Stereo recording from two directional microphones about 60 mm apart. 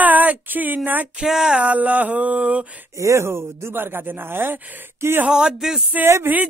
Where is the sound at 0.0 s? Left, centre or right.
Right.